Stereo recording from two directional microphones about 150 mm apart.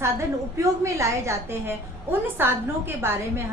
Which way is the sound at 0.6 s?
20° right (ahead or behind).